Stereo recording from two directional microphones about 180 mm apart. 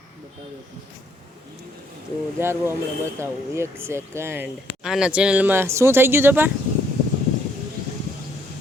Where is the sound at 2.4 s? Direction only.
15° right (ahead or behind).